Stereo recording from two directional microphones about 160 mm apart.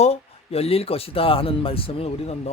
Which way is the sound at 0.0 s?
40° left (ahead or behind).